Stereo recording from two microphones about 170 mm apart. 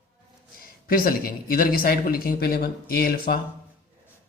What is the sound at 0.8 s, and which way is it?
Speech, 60° left (ahead or behind).